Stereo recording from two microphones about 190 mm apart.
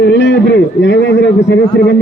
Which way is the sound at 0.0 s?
70° left (ahead or behind).